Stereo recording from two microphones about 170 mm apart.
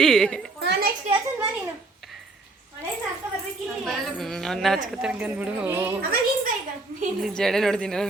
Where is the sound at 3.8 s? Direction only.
Centre (ahead or behind).